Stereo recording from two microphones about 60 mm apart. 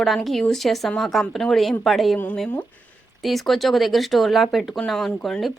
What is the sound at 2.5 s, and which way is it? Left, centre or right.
Speech, left.